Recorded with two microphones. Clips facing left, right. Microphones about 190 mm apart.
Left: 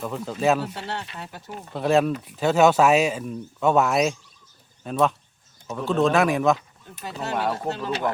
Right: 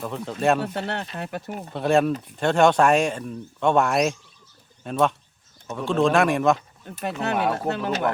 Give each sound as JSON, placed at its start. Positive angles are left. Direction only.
{"t": 0.0, "sound": "speech", "side_deg": 0}
{"t": 0.7, "sound": "speech", "side_deg": -55}
{"t": 1.7, "sound": "speech", "side_deg": 0}
{"t": 6.8, "sound": "speech", "side_deg": -65}